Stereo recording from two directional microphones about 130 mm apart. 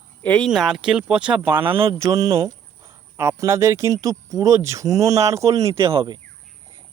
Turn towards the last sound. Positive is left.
turn(degrees=-40)  # may be behind; listen again after turning